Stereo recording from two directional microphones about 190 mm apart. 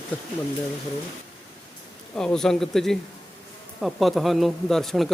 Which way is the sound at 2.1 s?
5° left (ahead or behind).